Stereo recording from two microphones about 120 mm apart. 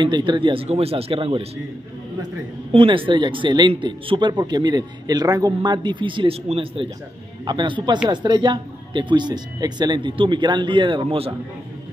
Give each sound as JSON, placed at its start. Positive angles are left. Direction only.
{"t": 0.0, "sound": "speech", "side_deg": -40}
{"t": 2.7, "sound": "speech", "side_deg": -45}